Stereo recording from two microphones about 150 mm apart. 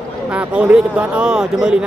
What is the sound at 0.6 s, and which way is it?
Speech, 10° right (ahead or behind).